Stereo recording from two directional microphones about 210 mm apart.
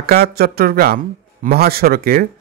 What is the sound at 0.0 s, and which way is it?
Speech, 50° right (ahead or behind).